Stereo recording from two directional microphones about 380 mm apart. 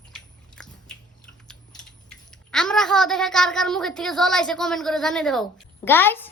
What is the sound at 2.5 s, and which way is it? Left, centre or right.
Speech, centre.